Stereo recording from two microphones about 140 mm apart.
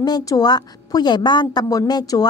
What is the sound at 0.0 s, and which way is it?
A woman's voice, 25° left (ahead or behind).